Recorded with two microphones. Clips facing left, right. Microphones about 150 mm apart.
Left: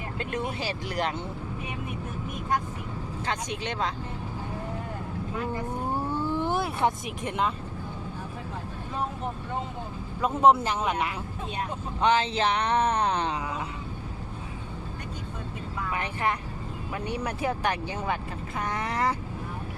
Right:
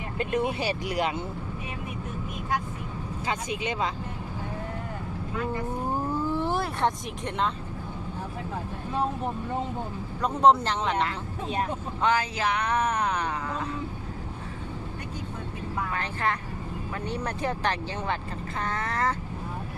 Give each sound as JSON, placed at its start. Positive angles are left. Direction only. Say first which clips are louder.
{"t": 0.2, "sound": "speech", "louder": "right 5 dB", "side_deg": -20}
{"t": 0.9, "sound": "speech", "louder": "even", "side_deg": -5}
{"t": 3.2, "sound": "speech", "louder": "right 2 dB", "side_deg": -5}
{"t": 5.9, "sound": "vehicle", "louder": "right 1 dB", "side_deg": -5}
{"t": 10.2, "sound": "speech", "louder": "even", "side_deg": 5}
{"t": 12.0, "sound": "a sound", "louder": "left 2 dB", "side_deg": 25}
{"t": 15.9, "sound": "speech", "louder": "left 3 dB", "side_deg": 15}